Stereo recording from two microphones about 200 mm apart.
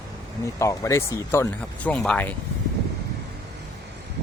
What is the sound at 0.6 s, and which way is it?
Speech, 15° left (ahead or behind).